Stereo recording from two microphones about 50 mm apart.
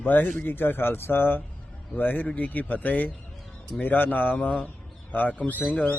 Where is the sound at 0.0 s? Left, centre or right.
Left.